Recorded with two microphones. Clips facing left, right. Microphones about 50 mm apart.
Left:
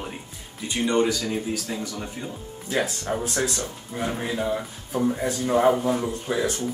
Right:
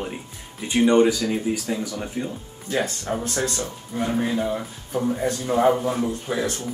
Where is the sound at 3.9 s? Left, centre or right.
Centre.